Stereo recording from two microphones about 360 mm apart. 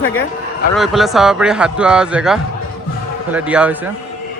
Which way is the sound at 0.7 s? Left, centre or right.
Centre.